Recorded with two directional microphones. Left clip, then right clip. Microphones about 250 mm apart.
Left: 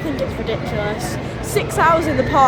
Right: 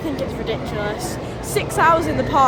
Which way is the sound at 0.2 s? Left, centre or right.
Centre.